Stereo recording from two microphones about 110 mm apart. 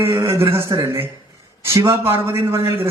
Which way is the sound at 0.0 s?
25° right (ahead or behind).